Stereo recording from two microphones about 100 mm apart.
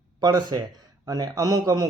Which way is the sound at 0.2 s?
45° right (ahead or behind).